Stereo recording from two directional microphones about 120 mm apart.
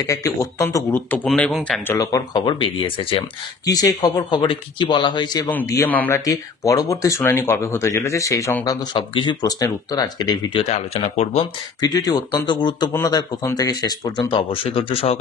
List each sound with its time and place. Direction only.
0.0 s speech: 30° left (ahead or behind); by 2.0 s 10° left (ahead or behind)
2.0 s speech: 30° left (ahead or behind)
2.4 s speech: 50° left (ahead or behind)
3.6 s speech: 30° left (ahead or behind)
5.9 s speech: 15° left (ahead or behind)
8.6 s speech: 40° left (ahead or behind)
10.6 s speech: 60° left (ahead or behind)
11.8 s speech: 35° left (ahead or behind)
12.9 s speech: 30° left (ahead or behind)
14.3 s speech: 50° left (ahead or behind)